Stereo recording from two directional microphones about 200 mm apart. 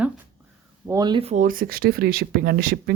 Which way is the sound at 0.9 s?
20° right (ahead or behind).